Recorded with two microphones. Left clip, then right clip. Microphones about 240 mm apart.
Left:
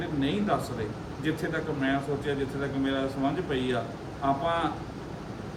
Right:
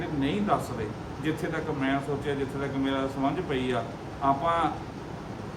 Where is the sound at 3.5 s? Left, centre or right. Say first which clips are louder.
Even; centre.